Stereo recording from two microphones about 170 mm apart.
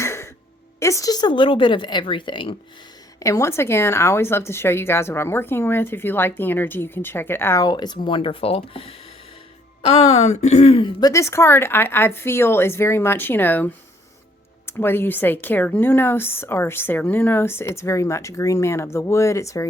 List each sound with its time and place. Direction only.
0.0 s music: 15° left (ahead or behind)
0.8 s speech: 20° left (ahead or behind)
3.2 s a woman's voice: 20° left (ahead or behind)
14.7 s a woman's voice: 15° left (ahead or behind)